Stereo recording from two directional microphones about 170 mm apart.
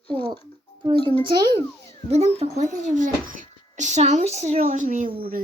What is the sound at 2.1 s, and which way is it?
Speech, 35° right (ahead or behind).